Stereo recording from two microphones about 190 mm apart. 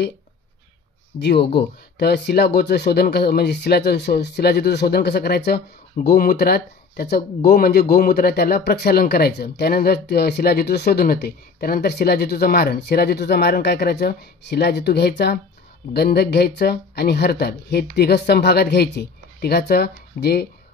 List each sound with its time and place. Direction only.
1.2 s speech: 60° left (ahead or behind)